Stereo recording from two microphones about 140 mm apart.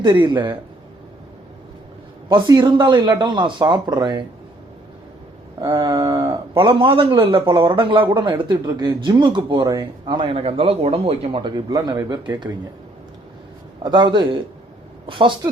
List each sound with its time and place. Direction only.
0.0 s speech: 35° right (ahead or behind)
2.3 s speech: 35° right (ahead or behind)
5.5 s a sound: 30° right (ahead or behind)
6.2 s speech: 40° right (ahead or behind)
7.5 s a sound: 25° right (ahead or behind)
7.8 s speech: 40° right (ahead or behind)
13.8 s a woman's voice: 30° right (ahead or behind)